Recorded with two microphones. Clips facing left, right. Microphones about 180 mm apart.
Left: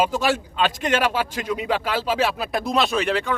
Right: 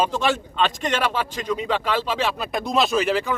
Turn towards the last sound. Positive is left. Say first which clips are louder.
# right 1 dB
turn(degrees=0)  # may be behind; listen again after turning